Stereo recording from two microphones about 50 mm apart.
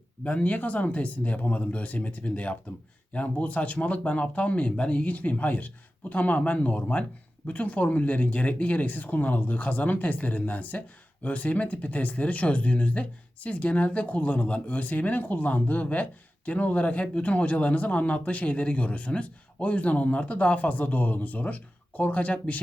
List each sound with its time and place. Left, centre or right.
0.3 s speech: left